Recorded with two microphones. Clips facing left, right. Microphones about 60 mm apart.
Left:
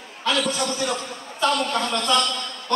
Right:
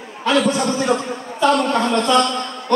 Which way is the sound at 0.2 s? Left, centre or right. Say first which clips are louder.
Right 6 dB; right.